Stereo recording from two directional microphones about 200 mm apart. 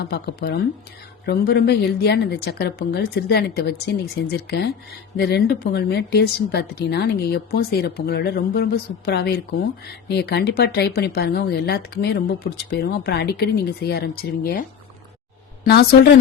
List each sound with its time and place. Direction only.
0.1 s a woman's voice: 55° left (ahead or behind)
15.6 s a woman's voice: 55° left (ahead or behind)